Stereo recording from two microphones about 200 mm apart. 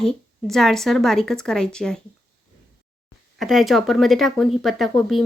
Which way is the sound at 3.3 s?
Centre (ahead or behind).